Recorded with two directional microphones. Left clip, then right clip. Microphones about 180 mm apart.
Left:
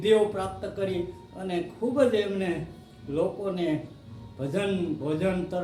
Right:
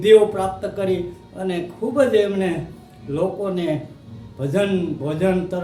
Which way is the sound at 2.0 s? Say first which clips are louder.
Right 8 dB; 20° right (ahead or behind).